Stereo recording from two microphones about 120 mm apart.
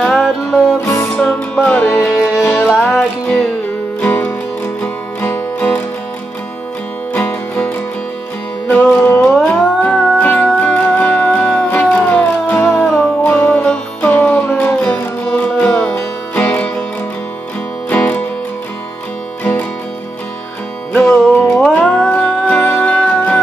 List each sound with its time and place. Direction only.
0.0 s music: 5° left (ahead or behind)
7.2 s music: 15° left (ahead or behind)
17.8 s music: 15° left (ahead or behind)
20.9 s music: 10° left (ahead or behind)